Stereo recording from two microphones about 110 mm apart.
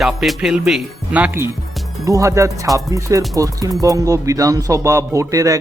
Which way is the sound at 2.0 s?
30° right (ahead or behind).